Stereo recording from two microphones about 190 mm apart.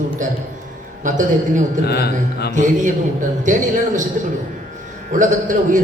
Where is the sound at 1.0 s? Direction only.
40° right (ahead or behind).